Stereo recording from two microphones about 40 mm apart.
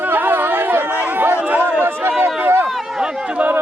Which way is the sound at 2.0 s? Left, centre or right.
Right.